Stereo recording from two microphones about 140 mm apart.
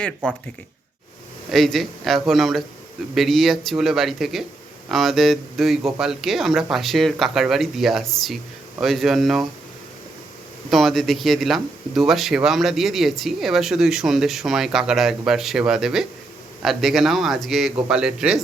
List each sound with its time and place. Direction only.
0.0 s speech: 5° left (ahead or behind)
1.5 s speech: centre (ahead or behind)
10.7 s speech: centre (ahead or behind)